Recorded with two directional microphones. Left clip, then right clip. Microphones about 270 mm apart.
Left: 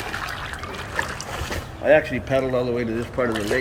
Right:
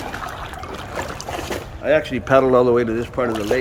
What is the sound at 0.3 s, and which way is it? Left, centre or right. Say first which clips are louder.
Trickle: even; right.